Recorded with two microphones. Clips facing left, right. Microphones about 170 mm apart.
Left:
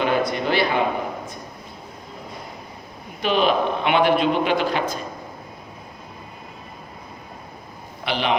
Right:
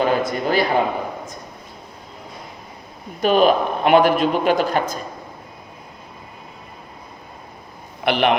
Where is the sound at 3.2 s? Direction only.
45° right (ahead or behind).